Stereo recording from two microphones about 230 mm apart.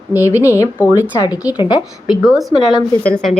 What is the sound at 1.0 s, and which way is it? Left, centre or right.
A woman's voice, centre.